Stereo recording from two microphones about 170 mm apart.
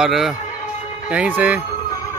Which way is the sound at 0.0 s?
Centre (ahead or behind).